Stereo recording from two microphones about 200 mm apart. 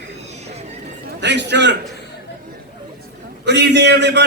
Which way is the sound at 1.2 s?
60° right (ahead or behind).